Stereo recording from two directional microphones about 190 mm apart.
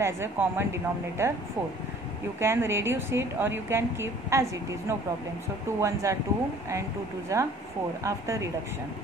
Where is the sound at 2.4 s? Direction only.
15° right (ahead or behind).